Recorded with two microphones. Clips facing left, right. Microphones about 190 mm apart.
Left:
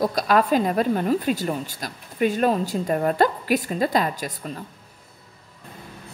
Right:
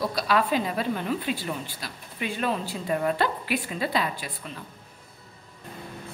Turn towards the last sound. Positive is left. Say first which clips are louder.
# left 5 dB
turn(degrees=40)  # may be behind; listen again after turning